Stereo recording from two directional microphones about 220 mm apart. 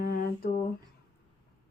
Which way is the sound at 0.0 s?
45° left (ahead or behind).